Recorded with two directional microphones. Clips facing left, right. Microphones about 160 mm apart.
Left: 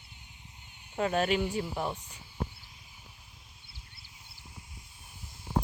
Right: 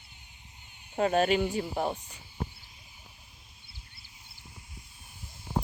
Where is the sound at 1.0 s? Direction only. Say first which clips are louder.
Right 3 dB; 35° right (ahead or behind).